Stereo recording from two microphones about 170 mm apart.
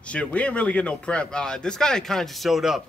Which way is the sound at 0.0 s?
5° left (ahead or behind).